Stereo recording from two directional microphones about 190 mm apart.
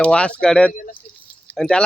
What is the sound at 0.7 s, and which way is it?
Speech, 45° left (ahead or behind).